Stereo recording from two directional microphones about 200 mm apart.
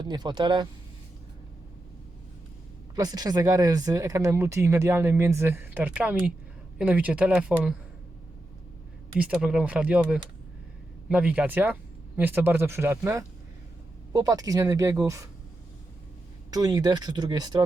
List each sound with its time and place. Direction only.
0.0 s speech: 20° right (ahead or behind)
2.9 s speech: 20° right (ahead or behind)
9.3 s speech: 5° right (ahead or behind)
16.5 s speech: 20° right (ahead or behind)